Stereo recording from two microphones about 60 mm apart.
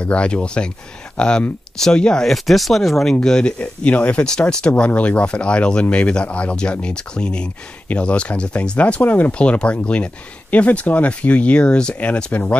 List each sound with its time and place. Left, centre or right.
0.0 s speech: centre
2.2 s speech: centre; by 12.5 s left